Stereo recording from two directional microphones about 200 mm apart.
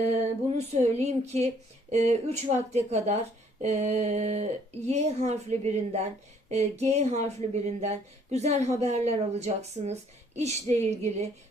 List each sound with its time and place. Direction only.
0.5 s speech: 35° right (ahead or behind)